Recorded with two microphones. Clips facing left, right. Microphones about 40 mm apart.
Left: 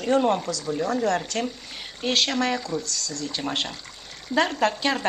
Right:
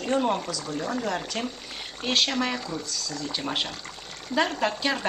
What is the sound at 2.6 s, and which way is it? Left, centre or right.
Speech, centre.